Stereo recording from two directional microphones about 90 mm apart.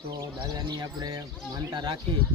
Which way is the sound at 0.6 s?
50° right (ahead or behind).